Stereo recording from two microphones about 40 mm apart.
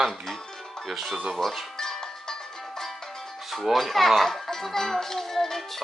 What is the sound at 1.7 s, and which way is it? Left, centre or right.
Cowbell, centre.